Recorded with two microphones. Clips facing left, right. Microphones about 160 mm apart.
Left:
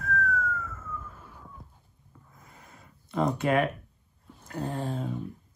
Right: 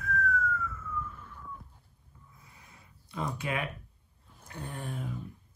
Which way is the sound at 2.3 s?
55° left (ahead or behind).